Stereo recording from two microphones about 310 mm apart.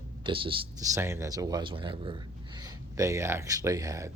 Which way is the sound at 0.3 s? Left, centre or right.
Centre.